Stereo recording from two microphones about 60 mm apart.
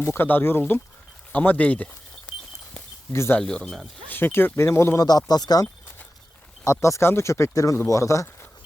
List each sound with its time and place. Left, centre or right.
0.0 s speech: left
1.3 s speech: left
3.1 s speech: left
3.4 s speech: centre
4.1 s speech: left
4.9 s speech: left
6.7 s speech: left
7.0 s speech: left
7.5 s speech: left